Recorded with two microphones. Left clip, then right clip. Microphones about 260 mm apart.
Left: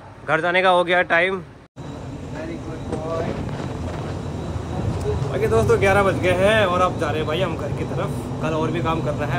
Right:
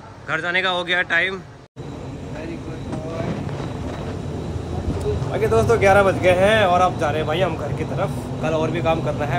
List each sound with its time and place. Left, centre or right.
0.3 s speech: centre
5.3 s speech: centre